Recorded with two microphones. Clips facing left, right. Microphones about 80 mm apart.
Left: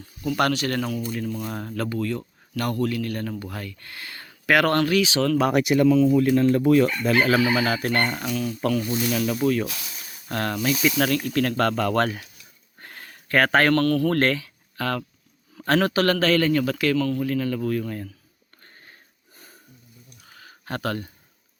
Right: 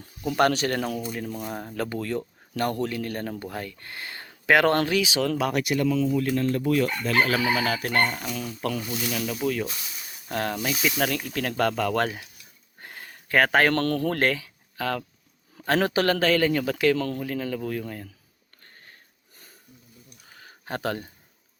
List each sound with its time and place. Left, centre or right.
0.2 s a man's voice: right
1.0 s speech: centre
1.9 s speech: right; by 5.3 s centre
5.5 s speech: left
5.9 s speech: centre
9.1 s speech: centre
10.2 s speech: centre
12.8 s a sound: centre
13.7 s a man's voice: right
14.1 s a man's voice: centre
20.7 s a man's voice: centre